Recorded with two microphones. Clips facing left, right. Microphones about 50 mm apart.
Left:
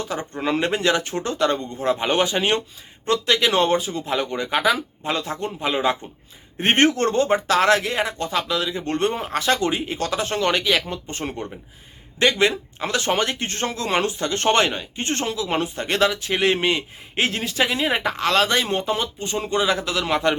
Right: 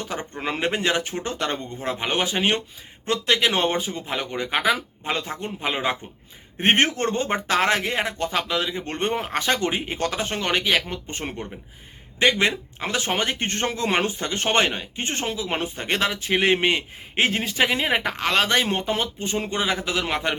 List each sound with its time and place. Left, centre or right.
0.3 s speech: centre
6.6 s speech: centre
7.1 s speech: centre
10.2 s speech: centre
12.2 s speech: centre
13.4 s speech: right